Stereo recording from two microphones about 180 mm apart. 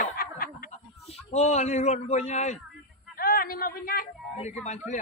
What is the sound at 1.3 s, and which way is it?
A man's voice, 40° left (ahead or behind).